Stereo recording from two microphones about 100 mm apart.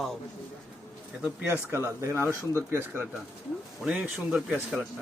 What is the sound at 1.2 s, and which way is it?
Speech, 15° right (ahead or behind).